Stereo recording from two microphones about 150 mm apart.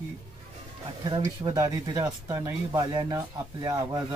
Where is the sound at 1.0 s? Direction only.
30° right (ahead or behind).